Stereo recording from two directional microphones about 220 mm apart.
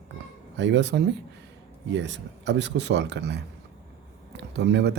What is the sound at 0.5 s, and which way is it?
Speech, 55° right (ahead or behind).